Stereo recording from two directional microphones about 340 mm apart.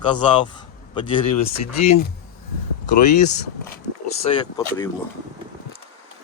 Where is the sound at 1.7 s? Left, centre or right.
Centre.